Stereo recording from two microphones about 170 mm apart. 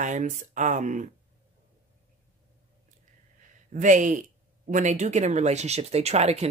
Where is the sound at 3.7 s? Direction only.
50° right (ahead or behind).